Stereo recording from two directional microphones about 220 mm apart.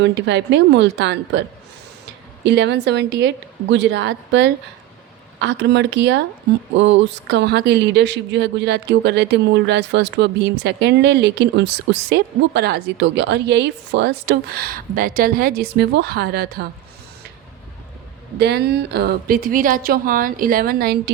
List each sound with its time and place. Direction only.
0.0 s speech: 55° right (ahead or behind)
2.4 s speech: 50° right (ahead or behind)
18.3 s speech: 50° right (ahead or behind)